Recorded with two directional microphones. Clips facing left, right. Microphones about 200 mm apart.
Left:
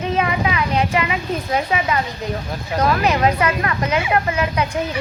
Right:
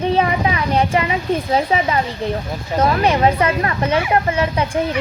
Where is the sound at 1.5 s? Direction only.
30° right (ahead or behind).